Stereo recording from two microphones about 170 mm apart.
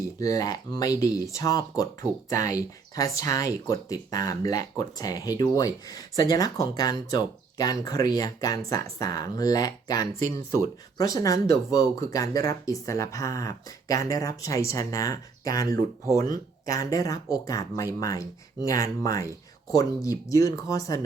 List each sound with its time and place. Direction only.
0.2 s speech: 20° left (ahead or behind)